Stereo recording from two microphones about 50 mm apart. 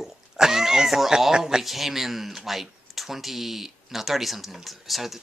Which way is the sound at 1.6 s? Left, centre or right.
Centre.